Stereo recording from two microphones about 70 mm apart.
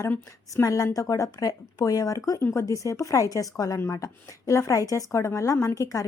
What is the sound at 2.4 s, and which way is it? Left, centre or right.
Speech, left.